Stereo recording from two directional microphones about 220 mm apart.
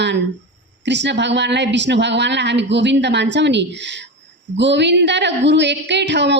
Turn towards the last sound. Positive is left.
turn(degrees=-50)  # may be behind; listen again after turning